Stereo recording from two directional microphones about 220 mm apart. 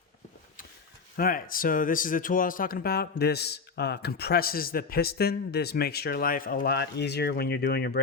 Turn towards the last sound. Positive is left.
turn(degrees=45)  # may be behind; listen again after turning